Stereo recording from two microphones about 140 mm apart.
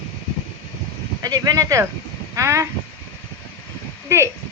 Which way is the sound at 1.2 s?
25° right (ahead or behind).